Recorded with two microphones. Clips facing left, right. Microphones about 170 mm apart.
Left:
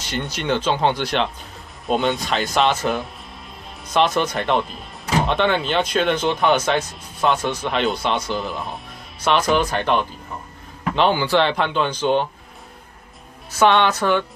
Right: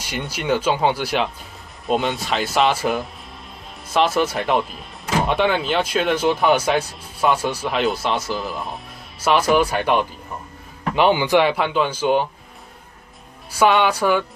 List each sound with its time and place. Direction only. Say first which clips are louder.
0.0 s speech: left 1 dB; 10° right (ahead or behind)
13.5 s speech: even; 5° right (ahead or behind)